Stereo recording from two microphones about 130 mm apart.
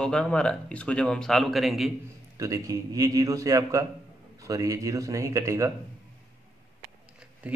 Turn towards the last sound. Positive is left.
turn(degrees=-10)  # may be behind; listen again after turning